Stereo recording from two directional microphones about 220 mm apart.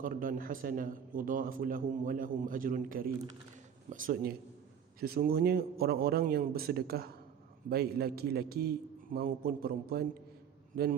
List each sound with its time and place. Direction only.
0.0 s a man's voice: 40° right (ahead or behind)